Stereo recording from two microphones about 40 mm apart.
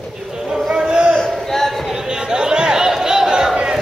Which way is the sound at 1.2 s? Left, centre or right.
Centre.